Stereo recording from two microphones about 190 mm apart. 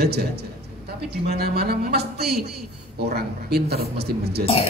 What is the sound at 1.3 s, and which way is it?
Speech, 55° right (ahead or behind).